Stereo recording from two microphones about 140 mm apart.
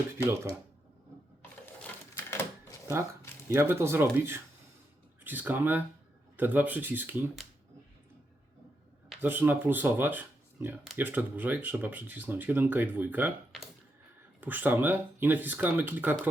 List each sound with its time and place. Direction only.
0.2 s speech: 15° right (ahead or behind)
2.1 s a sound: 15° left (ahead or behind)
3.5 s speech: 20° right (ahead or behind)
9.2 s speech: 15° right (ahead or behind)
14.4 s speech: 15° right (ahead or behind)